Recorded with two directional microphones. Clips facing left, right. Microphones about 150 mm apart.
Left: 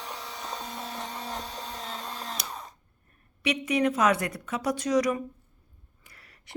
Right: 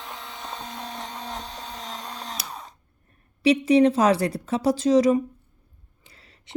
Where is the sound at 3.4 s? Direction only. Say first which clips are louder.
Right 9 dB; 30° right (ahead or behind).